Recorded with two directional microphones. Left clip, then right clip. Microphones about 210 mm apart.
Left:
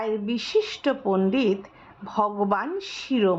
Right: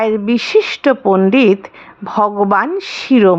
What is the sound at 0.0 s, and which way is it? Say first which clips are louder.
A woman's voice: right 12 dB; 30° right (ahead or behind).